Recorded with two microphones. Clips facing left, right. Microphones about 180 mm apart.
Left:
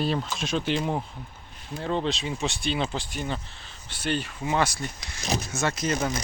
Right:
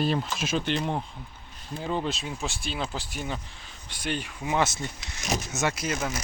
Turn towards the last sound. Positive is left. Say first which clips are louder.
# left 3 dB
turn(degrees=-5)  # may be behind; listen again after turning